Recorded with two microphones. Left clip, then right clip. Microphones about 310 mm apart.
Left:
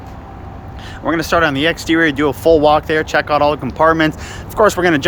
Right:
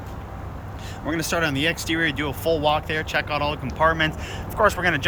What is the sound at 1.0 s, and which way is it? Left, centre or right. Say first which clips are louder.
Speech: left 10 dB; centre.